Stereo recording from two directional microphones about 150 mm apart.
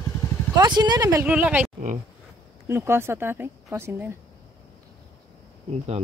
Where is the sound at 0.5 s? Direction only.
30° right (ahead or behind).